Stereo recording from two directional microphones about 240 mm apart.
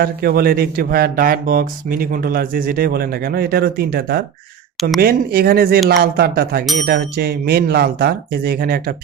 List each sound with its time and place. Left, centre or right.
0.0 s speech: right